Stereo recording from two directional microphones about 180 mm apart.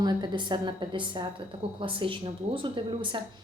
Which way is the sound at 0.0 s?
25° right (ahead or behind).